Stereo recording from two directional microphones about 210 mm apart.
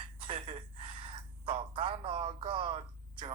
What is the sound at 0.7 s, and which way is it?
Gasp, 25° right (ahead or behind).